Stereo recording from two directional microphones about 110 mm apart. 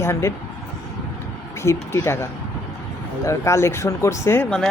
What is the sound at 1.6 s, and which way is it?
Speech, 25° left (ahead or behind).